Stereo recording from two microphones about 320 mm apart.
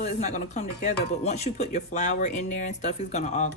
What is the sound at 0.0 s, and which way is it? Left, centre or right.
Speech, left.